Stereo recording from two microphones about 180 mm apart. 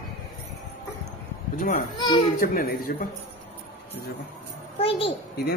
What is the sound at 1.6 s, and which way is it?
Speech, 50° left (ahead or behind).